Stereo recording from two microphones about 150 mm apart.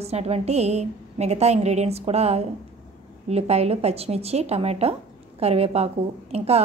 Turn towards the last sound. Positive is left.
turn(degrees=-45)  # may be behind; listen again after turning